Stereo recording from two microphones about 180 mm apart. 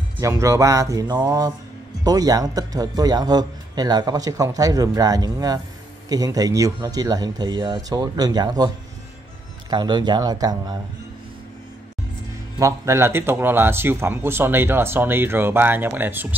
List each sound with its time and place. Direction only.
0.2 s a man's voice: 15° right (ahead or behind)
12.5 s a man's voice: 15° right (ahead or behind)